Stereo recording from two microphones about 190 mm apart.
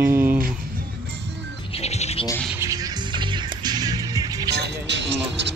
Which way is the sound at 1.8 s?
35° left (ahead or behind).